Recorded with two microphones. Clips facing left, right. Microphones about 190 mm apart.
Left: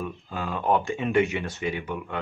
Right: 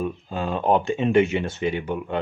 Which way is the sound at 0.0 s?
25° right (ahead or behind).